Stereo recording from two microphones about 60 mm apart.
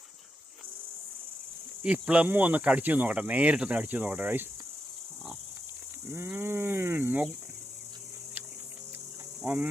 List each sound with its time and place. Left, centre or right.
1.8 s speech: right
6.1 s speech: right
9.4 s insect: centre